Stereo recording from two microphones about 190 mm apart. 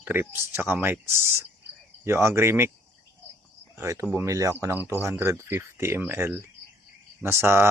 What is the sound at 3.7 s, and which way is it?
Speech, 15° right (ahead or behind).